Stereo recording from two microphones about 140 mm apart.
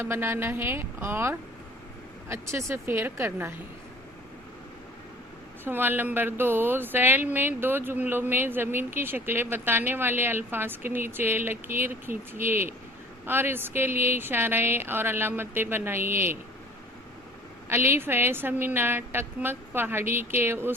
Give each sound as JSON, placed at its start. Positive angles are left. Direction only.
{"t": 0.0, "sound": "speech", "side_deg": -15}
{"t": 5.6, "sound": "speech", "side_deg": -15}
{"t": 17.7, "sound": "speech", "side_deg": -15}